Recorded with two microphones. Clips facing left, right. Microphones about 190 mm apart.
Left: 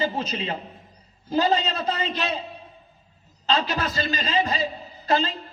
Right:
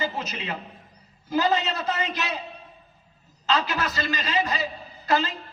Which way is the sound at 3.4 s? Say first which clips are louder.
Left 1 dB; 25° left (ahead or behind).